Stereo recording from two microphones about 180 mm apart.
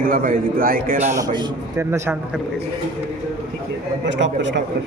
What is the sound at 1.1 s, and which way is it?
Speech, 20° right (ahead or behind).